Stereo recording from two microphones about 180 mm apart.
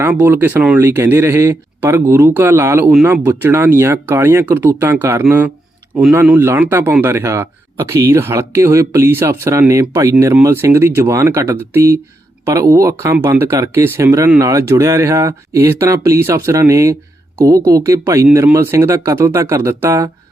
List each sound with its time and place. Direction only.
0.0 s speech: 10° right (ahead or behind)